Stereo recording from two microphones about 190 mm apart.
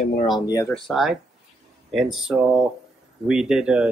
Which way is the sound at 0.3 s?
15° left (ahead or behind).